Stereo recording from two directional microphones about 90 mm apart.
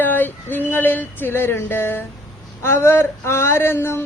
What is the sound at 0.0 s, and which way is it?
Music, 20° left (ahead or behind).